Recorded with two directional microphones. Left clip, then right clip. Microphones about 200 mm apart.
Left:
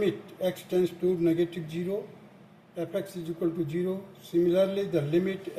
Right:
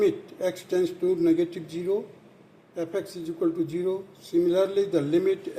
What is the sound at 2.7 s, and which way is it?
Speech, 35° right (ahead or behind).